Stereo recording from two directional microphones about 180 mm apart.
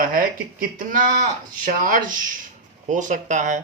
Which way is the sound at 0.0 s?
55° right (ahead or behind).